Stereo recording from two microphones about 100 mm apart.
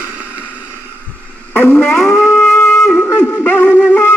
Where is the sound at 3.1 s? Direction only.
20° left (ahead or behind).